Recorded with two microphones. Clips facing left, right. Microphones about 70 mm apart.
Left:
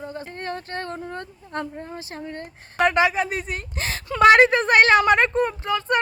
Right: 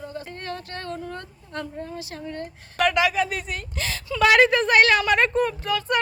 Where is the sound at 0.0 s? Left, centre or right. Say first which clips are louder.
Left 2 dB; left.